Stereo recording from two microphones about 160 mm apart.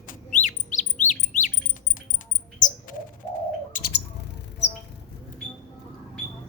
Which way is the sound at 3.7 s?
80° left.